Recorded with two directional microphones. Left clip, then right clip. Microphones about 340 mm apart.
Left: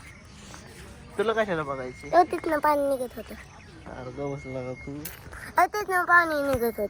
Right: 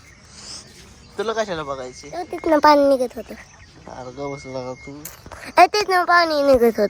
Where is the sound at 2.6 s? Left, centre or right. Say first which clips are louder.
Right 11 dB; right.